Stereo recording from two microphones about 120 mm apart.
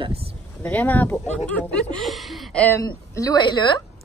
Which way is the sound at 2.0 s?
Centre (ahead or behind).